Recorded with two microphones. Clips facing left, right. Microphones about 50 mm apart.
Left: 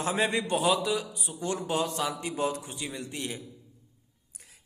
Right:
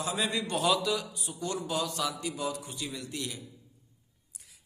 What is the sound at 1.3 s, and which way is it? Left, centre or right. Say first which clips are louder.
A man's voice: left 3 dB; left.